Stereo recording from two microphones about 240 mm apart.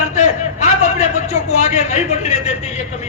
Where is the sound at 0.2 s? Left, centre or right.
Left.